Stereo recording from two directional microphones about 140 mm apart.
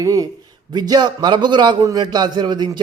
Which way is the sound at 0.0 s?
25° right (ahead or behind).